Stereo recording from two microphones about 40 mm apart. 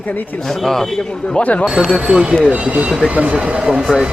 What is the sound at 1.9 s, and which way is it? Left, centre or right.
Speech, centre.